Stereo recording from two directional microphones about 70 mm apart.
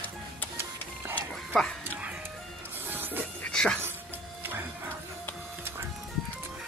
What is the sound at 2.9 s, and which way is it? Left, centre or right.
Music, right.